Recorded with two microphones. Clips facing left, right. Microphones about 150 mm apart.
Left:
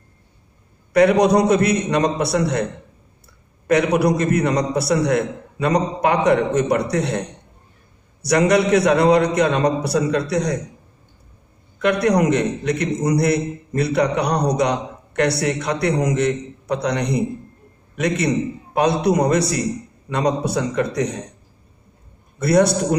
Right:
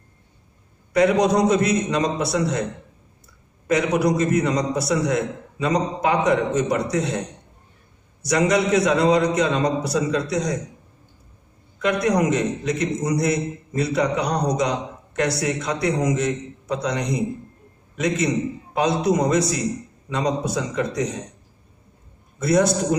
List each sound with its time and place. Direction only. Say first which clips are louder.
0.9 s a man's voice: left 3 dB; 65° left (ahead or behind)
11.8 s a man's voice: left 3 dB; 65° left (ahead or behind)
22.4 s a man's voice: left 3 dB; 65° left (ahead or behind)